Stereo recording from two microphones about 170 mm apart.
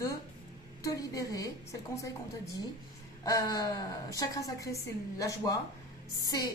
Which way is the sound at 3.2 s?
20° left (ahead or behind).